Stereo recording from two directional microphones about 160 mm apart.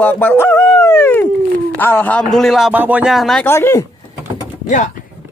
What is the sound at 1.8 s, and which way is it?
A man's voice, 10° left (ahead or behind).